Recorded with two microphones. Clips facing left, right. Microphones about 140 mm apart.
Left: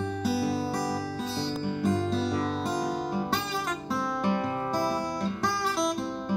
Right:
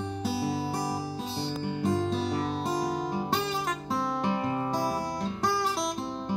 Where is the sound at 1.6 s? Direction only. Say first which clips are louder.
Even; 20° right (ahead or behind).